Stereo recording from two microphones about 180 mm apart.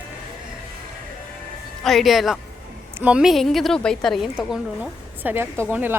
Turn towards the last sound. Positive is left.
turn(degrees=-10)  # may be behind; listen again after turning